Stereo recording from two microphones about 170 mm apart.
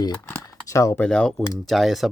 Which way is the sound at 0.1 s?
15° left (ahead or behind).